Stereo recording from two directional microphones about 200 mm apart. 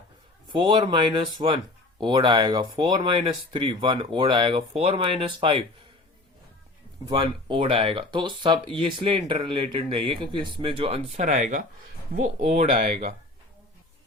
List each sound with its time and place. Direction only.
0.5 s speech: 25° right (ahead or behind)
7.1 s speech: 25° right (ahead or behind)